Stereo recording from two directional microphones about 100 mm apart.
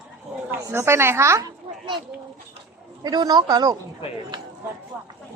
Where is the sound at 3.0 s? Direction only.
45° right (ahead or behind).